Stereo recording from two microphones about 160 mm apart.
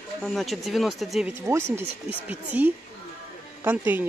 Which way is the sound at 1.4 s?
15° right (ahead or behind).